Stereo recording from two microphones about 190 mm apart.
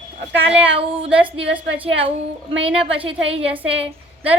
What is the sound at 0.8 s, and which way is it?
A woman's voice, 30° right (ahead or behind).